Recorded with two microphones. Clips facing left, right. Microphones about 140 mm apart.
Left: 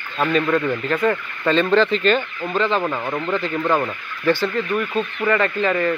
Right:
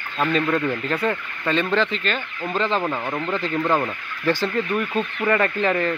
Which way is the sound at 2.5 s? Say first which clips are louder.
Left 3 dB; 25° right (ahead or behind).